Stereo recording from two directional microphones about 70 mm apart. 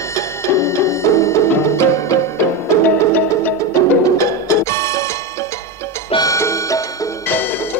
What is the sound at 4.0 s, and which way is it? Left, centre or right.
Music, left.